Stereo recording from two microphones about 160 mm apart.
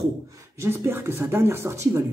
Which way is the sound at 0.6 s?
15° right (ahead or behind).